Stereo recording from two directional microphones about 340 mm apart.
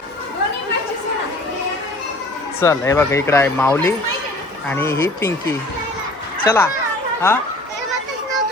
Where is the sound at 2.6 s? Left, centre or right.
Centre.